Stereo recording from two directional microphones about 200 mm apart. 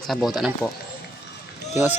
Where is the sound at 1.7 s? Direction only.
10° right (ahead or behind).